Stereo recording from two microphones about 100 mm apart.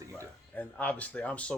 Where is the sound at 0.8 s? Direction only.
15° left (ahead or behind).